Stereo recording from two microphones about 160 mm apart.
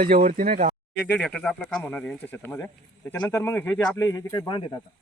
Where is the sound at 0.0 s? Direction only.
65° right (ahead or behind).